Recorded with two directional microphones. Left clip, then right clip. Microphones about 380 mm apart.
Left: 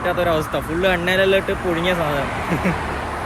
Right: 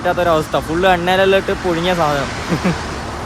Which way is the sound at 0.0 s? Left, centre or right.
Centre.